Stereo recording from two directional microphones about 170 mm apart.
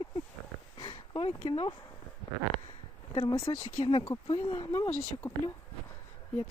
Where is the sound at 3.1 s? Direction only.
30° left (ahead or behind).